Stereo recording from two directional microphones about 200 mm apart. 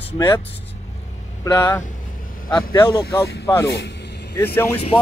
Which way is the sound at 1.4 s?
15° left (ahead or behind).